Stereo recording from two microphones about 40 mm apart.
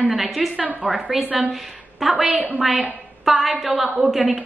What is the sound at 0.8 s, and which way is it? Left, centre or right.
Speech, right.